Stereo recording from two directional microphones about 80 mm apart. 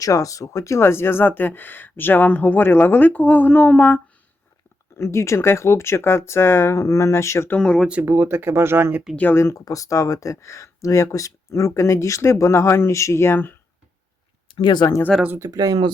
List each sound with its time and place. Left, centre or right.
0.0 s speech: left; by 4.0 s centre
4.9 s speech: left
8.0 s speech: right
9.1 s speech: left
9.4 s speech: left
14.4 s speech: left
15.4 s speech: right